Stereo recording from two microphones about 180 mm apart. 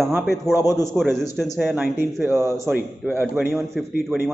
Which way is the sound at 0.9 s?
Centre (ahead or behind).